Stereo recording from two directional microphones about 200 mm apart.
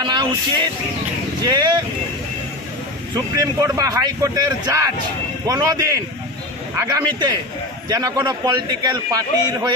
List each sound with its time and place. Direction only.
0.0 s speech: 20° right (ahead or behind)
3.2 s a man's voice: 15° right (ahead or behind)